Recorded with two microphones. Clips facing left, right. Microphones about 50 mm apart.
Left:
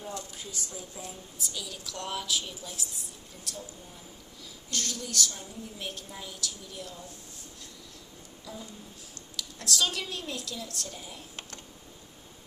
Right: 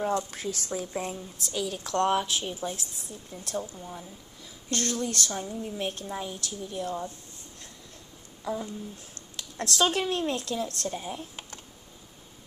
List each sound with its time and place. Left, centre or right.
0.3 s a woman's voice: right
8.5 s a woman's voice: right